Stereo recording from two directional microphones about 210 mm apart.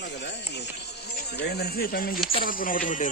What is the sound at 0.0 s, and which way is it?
Music, 55° left (ahead or behind).